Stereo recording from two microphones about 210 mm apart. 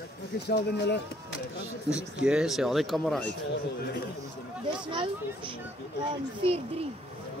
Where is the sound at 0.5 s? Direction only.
55° left (ahead or behind).